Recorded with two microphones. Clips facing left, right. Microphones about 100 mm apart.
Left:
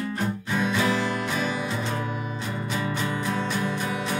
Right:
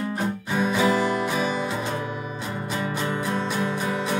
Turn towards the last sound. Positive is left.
turn(degrees=-20)  # may be behind; listen again after turning